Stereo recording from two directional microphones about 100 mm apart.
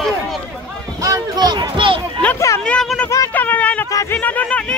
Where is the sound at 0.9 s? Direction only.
35° right (ahead or behind); by 2.0 s 50° right (ahead or behind).